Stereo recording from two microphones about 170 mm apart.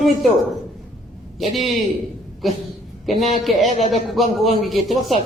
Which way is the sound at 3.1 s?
40° left (ahead or behind).